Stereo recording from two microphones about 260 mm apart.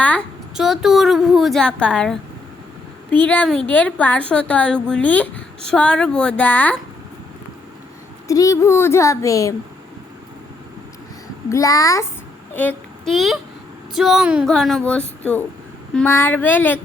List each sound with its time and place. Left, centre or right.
0.0 s a woman's voice: centre
8.3 s speech: centre
11.4 s a woman's voice: centre